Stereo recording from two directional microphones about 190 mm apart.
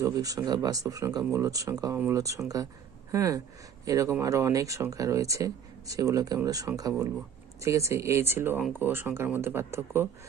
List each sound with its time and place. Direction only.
0.0 s speech: 20° right (ahead or behind)